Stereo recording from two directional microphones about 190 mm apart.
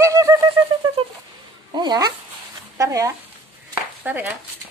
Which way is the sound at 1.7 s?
20° right (ahead or behind).